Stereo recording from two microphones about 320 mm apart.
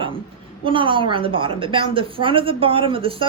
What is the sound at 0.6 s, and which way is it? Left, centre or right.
A woman's voice, centre.